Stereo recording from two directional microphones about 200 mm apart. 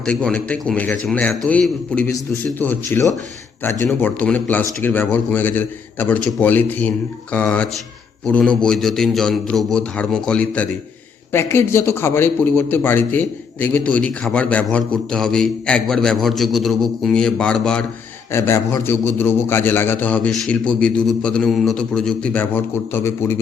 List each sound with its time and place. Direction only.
0.0 s a man's voice: 5° left (ahead or behind)